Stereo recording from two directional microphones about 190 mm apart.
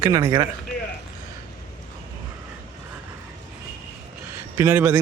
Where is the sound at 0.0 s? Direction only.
20° right (ahead or behind).